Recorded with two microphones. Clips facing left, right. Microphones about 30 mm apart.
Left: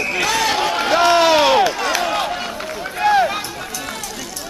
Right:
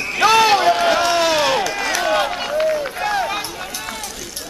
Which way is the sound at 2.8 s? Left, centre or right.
Centre.